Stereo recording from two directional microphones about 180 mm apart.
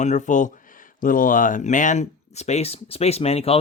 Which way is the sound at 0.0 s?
40° left (ahead or behind).